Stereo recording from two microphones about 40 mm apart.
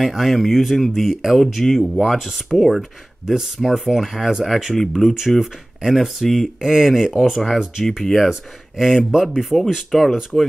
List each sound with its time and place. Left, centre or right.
0.0 s speech: centre
6.6 s speech: centre
9.8 s speech: centre